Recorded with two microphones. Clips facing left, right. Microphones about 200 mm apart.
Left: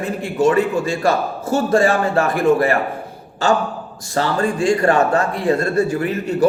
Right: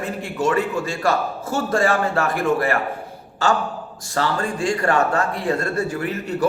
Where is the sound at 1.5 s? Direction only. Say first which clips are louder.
Left 5 dB; 20° left (ahead or behind).